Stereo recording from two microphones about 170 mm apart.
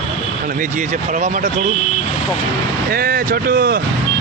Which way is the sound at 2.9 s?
60° right (ahead or behind).